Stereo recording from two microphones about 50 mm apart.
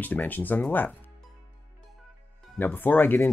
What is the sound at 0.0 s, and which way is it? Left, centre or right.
Speech, left.